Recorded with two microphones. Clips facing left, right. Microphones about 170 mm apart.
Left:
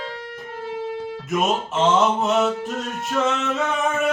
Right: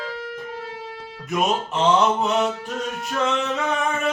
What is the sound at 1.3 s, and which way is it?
Music, centre (ahead or behind).